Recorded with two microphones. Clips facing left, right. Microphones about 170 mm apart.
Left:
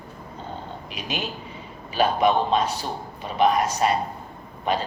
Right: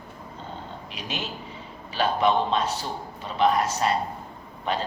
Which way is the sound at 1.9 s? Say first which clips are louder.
Left 2 dB; 15° left (ahead or behind).